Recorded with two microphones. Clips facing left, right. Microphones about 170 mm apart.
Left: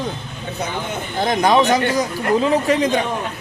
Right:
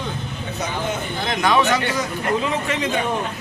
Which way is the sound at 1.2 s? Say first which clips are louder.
Left 4 dB; 40° left (ahead or behind).